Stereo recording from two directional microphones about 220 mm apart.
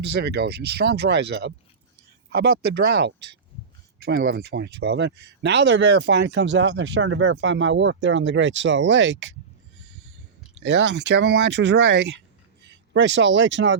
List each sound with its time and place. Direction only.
0.0 s speech: 50° right (ahead or behind)
10.6 s speech: 55° right (ahead or behind)